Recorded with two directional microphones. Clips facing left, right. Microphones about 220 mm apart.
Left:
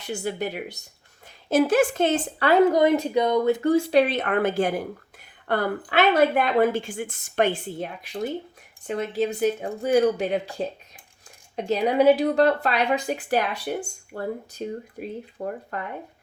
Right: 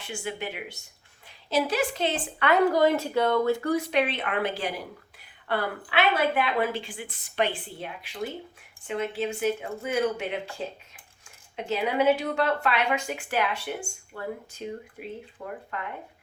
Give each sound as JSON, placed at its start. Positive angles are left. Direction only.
{"t": 0.0, "sound": "speech", "side_deg": 40}
{"t": 1.5, "sound": "a woman's voice", "side_deg": 50}
{"t": 2.6, "sound": "a woman's voice", "side_deg": 20}
{"t": 11.5, "sound": "speech", "side_deg": 35}